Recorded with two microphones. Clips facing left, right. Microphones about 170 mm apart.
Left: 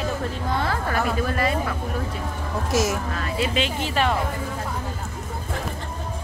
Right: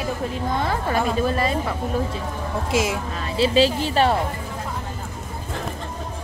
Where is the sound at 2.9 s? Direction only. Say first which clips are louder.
Right 1 dB; 25° right (ahead or behind).